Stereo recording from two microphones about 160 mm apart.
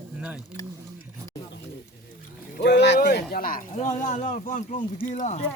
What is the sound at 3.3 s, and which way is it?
Speech, 60° left (ahead or behind).